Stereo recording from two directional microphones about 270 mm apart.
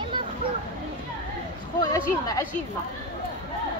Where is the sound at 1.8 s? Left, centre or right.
Centre.